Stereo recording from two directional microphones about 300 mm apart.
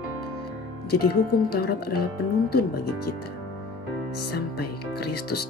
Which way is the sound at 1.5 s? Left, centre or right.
Left.